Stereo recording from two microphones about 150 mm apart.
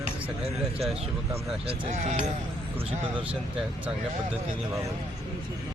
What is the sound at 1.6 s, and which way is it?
Speech, 45° right (ahead or behind).